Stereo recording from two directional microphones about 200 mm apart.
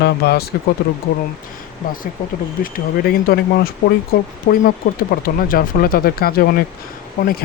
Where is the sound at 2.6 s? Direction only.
50° left (ahead or behind).